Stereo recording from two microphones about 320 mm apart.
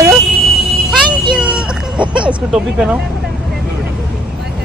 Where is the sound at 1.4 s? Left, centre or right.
Centre.